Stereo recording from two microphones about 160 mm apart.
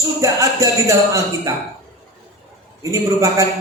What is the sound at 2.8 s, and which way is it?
Music, 20° right (ahead or behind).